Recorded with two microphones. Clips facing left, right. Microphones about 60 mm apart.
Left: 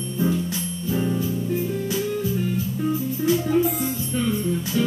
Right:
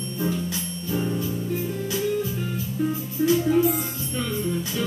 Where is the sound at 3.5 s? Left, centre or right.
Centre.